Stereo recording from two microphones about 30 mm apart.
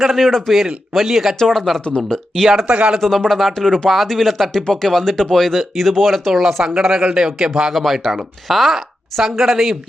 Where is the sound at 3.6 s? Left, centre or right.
Centre.